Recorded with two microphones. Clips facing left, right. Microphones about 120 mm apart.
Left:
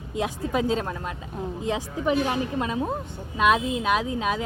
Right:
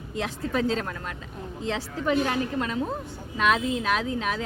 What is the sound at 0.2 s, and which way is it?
Speech, 15° left (ahead or behind).